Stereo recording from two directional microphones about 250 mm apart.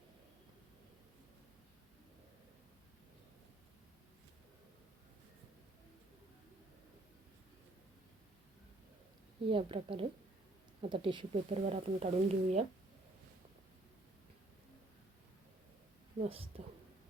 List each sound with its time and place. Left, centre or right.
9.5 s speech: right
16.2 s speech: right